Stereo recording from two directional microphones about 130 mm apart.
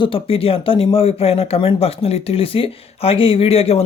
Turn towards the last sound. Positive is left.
turn(degrees=50)  # may be behind; listen again after turning